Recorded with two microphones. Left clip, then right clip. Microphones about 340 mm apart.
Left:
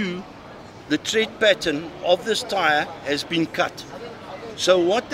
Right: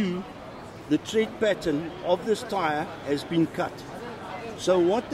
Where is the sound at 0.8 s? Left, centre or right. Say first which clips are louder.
Left 3 dB; left.